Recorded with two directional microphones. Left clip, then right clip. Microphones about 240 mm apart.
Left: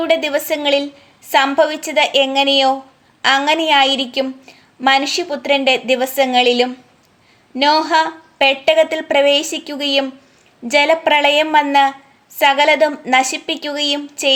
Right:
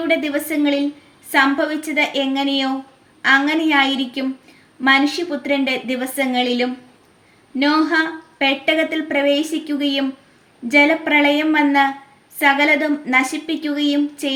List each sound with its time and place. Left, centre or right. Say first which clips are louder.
0.1 s a woman's voice: left 3 dB; left